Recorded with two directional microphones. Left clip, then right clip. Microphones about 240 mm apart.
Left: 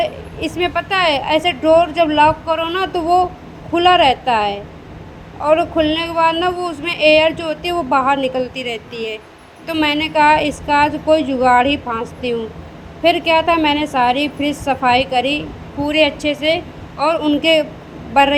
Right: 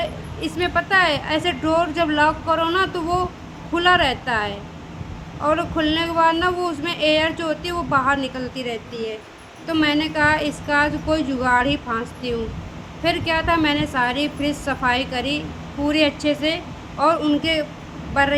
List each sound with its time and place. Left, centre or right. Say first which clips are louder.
0.0 s speech: left 6 dB; centre